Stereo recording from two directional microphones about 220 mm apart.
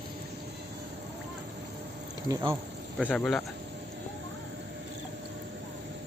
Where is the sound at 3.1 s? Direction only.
5° left (ahead or behind).